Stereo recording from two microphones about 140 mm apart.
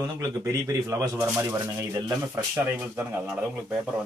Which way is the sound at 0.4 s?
25° right (ahead or behind).